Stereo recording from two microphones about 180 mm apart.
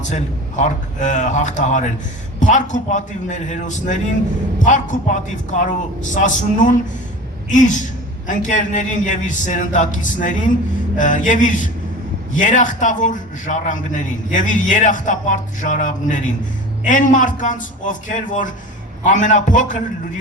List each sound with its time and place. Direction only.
0.0 s a man's voice: 40° left (ahead or behind)
7.5 s a man's voice: 45° left (ahead or behind)